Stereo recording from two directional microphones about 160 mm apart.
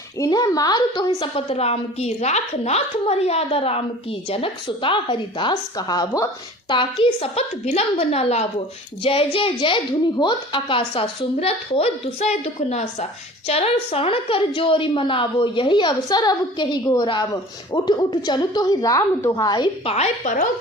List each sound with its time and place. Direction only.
0.2 s a woman's voice: 25° left (ahead or behind)
19.9 s a woman's voice: 45° left (ahead or behind)